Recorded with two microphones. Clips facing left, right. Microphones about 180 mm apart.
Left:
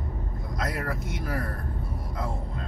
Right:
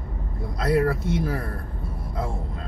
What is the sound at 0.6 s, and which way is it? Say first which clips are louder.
Speech: right 10 dB; 30° right (ahead or behind).